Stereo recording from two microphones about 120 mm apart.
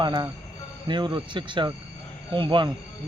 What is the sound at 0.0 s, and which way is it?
Speech, 40° right (ahead or behind).